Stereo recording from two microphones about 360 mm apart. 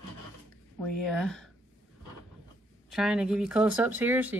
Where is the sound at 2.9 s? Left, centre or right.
Centre.